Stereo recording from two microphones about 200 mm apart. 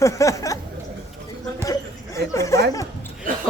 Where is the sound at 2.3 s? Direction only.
15° left (ahead or behind).